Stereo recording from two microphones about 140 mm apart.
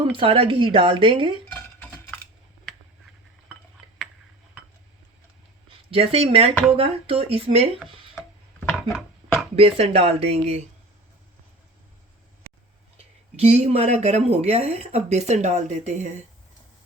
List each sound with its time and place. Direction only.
0.0 s a woman's voice: 40° right (ahead or behind)
1.5 s cutlery: 10° left (ahead or behind)
5.9 s speech: 45° right (ahead or behind)
8.6 s a sound: 5° left (ahead or behind)
9.6 s speech: 45° right (ahead or behind)
13.4 s speech: 50° right (ahead or behind)